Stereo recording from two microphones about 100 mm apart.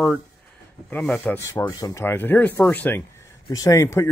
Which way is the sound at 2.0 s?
20° left (ahead or behind).